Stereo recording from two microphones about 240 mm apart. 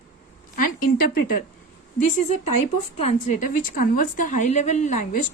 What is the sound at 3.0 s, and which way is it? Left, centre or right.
A woman's voice, left.